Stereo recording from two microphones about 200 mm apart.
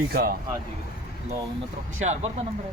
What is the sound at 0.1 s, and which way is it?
Speech, 50° right (ahead or behind).